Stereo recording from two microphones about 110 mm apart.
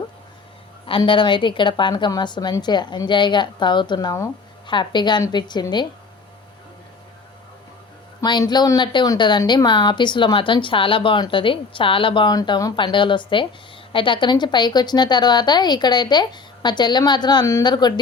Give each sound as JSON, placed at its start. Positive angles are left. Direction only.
{"t": 0.9, "sound": "a woman's voice", "side_deg": 50}
{"t": 8.2, "sound": "a woman's voice", "side_deg": 40}
{"t": 12.3, "sound": "a woman's voice", "side_deg": 35}
{"t": 12.7, "sound": "a woman's voice", "side_deg": 50}